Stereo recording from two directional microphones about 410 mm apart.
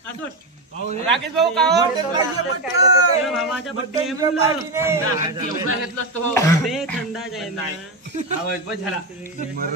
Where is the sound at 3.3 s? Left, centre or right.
Centre.